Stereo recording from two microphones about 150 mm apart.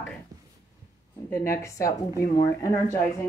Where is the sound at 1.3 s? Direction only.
15° left (ahead or behind).